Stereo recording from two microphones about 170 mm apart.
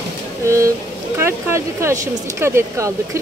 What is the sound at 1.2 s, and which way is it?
A woman's voice, 15° right (ahead or behind).